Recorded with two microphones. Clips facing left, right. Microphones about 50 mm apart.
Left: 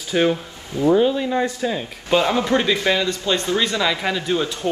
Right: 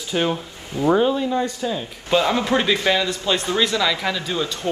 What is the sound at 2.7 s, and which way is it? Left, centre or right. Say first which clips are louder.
Speech: even; right.